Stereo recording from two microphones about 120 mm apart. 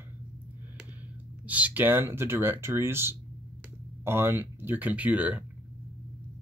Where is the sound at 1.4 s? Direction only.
15° right (ahead or behind).